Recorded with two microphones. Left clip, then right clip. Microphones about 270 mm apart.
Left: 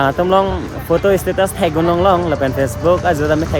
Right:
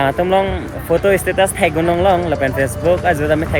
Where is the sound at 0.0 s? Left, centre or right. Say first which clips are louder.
Left 1 dB; centre.